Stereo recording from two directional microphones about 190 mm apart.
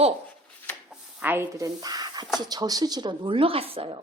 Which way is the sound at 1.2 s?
10° right (ahead or behind).